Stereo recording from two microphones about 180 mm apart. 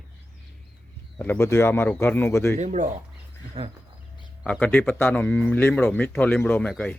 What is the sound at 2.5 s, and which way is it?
Speech, 40° right (ahead or behind).